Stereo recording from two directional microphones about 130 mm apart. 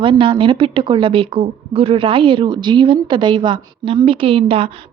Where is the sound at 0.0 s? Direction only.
40° right (ahead or behind).